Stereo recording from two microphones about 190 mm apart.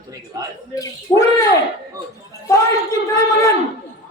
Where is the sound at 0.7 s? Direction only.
15° left (ahead or behind).